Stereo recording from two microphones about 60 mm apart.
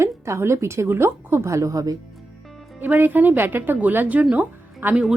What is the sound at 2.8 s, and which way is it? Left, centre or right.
A woman's voice, right.